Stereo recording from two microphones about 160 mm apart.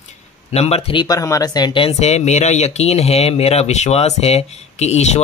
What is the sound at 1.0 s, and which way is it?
Speech, 20° left (ahead or behind).